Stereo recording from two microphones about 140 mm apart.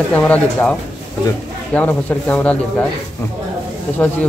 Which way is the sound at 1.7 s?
10° left (ahead or behind).